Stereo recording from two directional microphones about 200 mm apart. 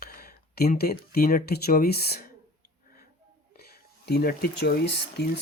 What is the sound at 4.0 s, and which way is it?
Speech, 50° left (ahead or behind).